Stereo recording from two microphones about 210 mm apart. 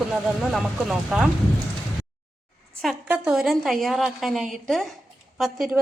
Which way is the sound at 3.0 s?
5° right (ahead or behind).